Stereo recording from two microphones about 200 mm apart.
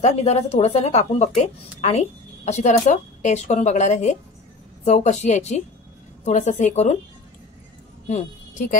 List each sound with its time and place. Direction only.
0.0 s speech: 35° left (ahead or behind)
8.1 s a woman's voice: 40° left (ahead or behind)